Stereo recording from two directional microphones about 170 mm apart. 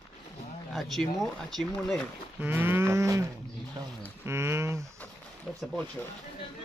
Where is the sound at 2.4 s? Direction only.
10° right (ahead or behind).